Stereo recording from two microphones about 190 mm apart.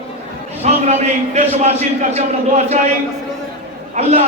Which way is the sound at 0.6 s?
35° right (ahead or behind).